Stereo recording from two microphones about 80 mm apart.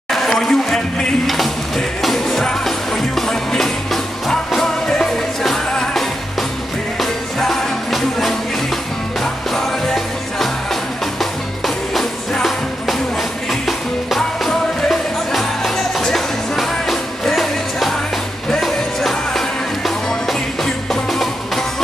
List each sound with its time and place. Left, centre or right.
0.1 s a sound: centre
2.0 s music: centre
11.6 s music: centre